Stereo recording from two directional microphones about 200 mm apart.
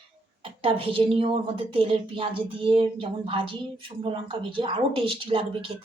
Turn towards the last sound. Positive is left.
turn(degrees=-25)  # may be behind; listen again after turning